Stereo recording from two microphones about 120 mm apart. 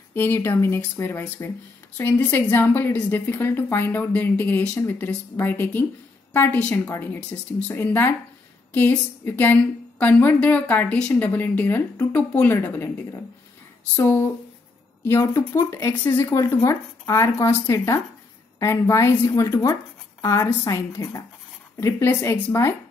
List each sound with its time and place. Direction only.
0.1 s a woman's voice: 20° left (ahead or behind)